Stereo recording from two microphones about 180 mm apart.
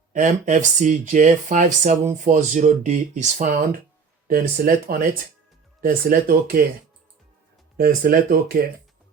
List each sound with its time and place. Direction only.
0.1 s speech: 45° right (ahead or behind)
7.8 s speech: 55° right (ahead or behind)